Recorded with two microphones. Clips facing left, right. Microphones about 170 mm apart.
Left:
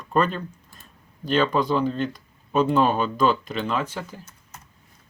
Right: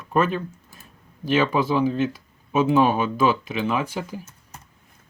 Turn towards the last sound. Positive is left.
turn(degrees=-10)  # may be behind; listen again after turning